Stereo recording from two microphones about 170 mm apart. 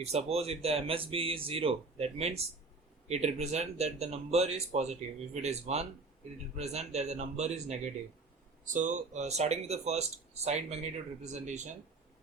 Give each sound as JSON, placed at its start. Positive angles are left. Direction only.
{"t": 0.0, "sound": "speech", "side_deg": -40}